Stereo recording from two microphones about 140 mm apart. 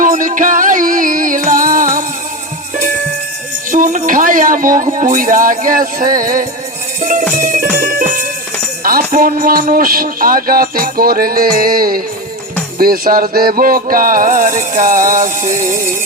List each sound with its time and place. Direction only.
0.0 s music: 70° right (ahead or behind)
3.7 s music: 75° right (ahead or behind)
7.1 s music: 70° right (ahead or behind)
15.4 s music: 25° right (ahead or behind)